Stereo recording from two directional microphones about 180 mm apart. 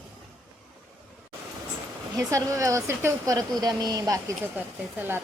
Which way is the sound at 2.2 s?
15° right (ahead or behind).